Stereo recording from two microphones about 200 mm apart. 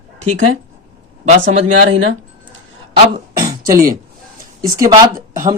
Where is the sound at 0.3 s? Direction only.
90° right.